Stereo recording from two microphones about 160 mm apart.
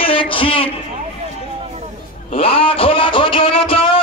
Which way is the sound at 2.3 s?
35° left (ahead or behind).